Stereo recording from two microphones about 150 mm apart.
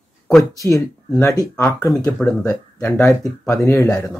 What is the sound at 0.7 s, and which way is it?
Speech, 20° left (ahead or behind).